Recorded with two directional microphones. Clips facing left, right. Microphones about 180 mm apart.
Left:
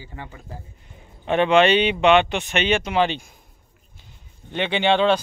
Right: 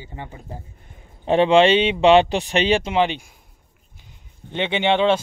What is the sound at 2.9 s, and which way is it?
A man's voice, 15° right (ahead or behind).